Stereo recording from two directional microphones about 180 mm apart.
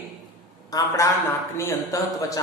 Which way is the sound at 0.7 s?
20° left (ahead or behind).